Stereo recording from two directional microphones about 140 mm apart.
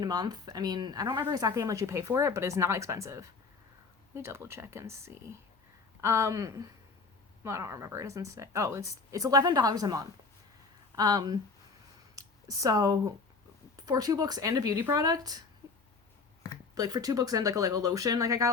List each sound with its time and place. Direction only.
0.0 s a woman's voice: 30° right (ahead or behind)
16.7 s a woman's voice: 25° right (ahead or behind)